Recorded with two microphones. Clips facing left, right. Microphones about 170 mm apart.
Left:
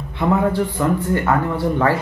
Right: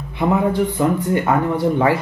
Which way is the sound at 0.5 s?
15° right (ahead or behind).